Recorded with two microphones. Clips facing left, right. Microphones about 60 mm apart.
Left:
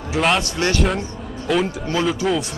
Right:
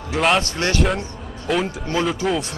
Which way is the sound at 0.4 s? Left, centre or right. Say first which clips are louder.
Left 1 dB; right.